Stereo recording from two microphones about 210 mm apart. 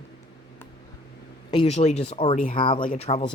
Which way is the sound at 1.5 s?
30° left (ahead or behind).